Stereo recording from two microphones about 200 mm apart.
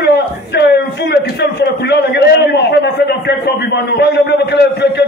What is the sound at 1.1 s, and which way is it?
A man's voice, 55° left (ahead or behind).